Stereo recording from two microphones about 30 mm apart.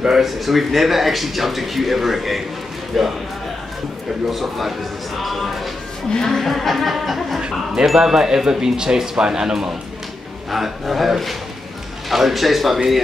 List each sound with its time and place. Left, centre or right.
0.2 s speech: centre
4.3 s speech: centre
7.3 s speech: right
7.8 s speech: centre
10.5 s speech: centre